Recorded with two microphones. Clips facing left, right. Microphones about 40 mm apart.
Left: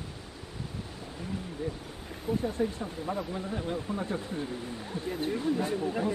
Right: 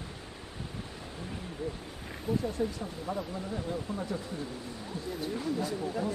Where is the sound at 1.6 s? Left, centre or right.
Left.